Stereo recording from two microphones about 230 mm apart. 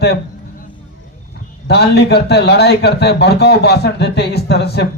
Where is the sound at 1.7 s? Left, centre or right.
Left.